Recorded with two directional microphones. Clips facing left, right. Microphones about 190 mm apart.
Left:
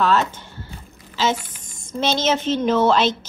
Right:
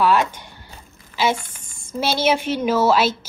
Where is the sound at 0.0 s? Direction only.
15° right (ahead or behind).